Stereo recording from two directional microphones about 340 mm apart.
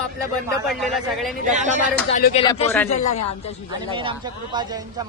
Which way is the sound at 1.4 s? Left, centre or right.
Right.